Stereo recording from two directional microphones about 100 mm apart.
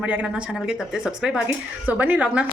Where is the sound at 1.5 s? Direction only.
15° right (ahead or behind).